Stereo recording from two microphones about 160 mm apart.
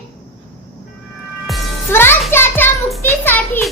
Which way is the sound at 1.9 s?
15° left (ahead or behind).